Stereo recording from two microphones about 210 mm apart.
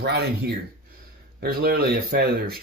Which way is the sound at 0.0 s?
50° right (ahead or behind).